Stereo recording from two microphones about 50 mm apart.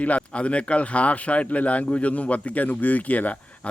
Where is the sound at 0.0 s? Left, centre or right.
Left.